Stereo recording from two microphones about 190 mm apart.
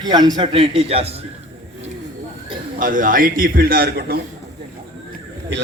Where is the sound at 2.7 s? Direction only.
45° right (ahead or behind).